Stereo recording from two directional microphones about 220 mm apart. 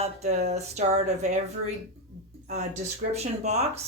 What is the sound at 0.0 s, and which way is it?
Speech, 30° right (ahead or behind).